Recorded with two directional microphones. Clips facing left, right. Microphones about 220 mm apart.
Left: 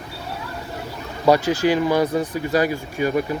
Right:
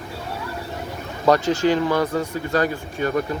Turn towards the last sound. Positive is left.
turn(degrees=10)  # may be behind; listen again after turning